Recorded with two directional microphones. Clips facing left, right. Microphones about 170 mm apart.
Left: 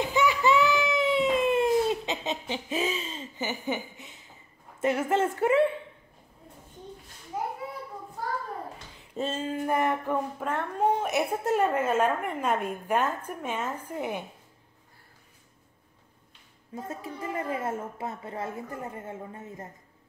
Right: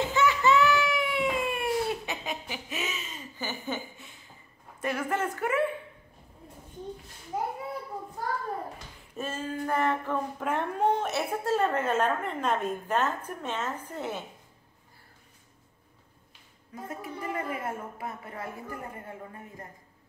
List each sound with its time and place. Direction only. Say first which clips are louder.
0.0 s baby cry: left 1 dB; 15° left (ahead or behind)
4.7 s a woman's voice: left 5 dB; 20° left (ahead or behind)
9.1 s a woman's voice: left 3 dB; 20° left (ahead or behind)
10.4 s speech: right 1 dB; 15° right (ahead or behind)
10.8 s a woman's voice: left 3 dB; 10° left (ahead or behind)
16.7 s a woman's voice: left 1 dB; 25° left (ahead or behind)